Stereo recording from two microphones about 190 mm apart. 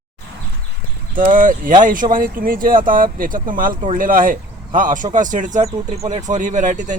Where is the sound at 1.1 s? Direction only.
45° right (ahead or behind).